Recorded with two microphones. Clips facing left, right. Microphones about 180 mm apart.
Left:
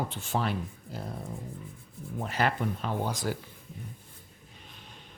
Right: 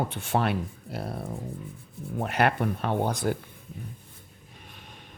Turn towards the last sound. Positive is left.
turn(degrees=-60)  # may be behind; listen again after turning